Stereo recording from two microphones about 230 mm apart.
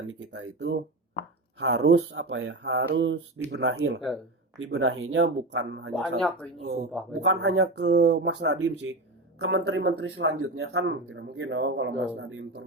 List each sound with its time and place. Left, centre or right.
0.1 s speech: right
8.0 s speech: right
8.3 s speech: right